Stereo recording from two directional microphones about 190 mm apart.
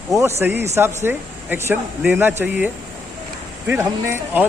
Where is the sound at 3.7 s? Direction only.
15° right (ahead or behind).